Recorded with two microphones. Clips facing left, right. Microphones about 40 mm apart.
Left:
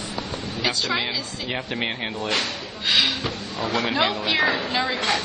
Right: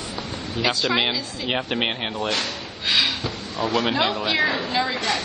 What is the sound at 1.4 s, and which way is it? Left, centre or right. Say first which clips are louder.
Speech: right 4 dB; right.